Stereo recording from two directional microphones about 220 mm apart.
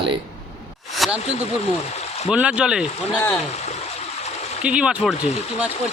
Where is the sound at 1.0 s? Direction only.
Centre (ahead or behind).